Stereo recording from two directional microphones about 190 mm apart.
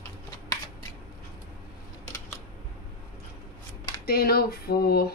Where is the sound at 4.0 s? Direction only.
55° left (ahead or behind).